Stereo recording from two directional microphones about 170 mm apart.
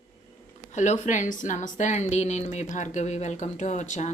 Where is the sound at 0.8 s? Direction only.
45° left (ahead or behind).